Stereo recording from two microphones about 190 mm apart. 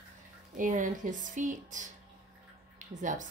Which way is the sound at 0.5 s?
45° right (ahead or behind).